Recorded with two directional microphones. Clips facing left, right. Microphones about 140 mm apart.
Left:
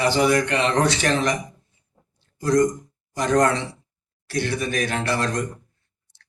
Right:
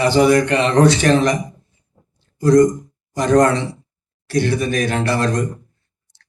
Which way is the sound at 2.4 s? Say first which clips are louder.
Right 7 dB; 45° right (ahead or behind).